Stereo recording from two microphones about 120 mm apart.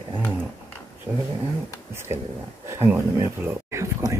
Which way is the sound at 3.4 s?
25° right (ahead or behind).